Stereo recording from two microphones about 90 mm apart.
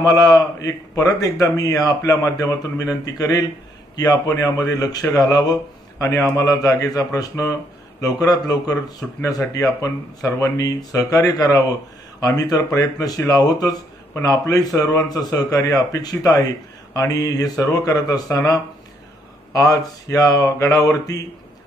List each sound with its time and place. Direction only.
0.0 s a man's voice: 45° left (ahead or behind)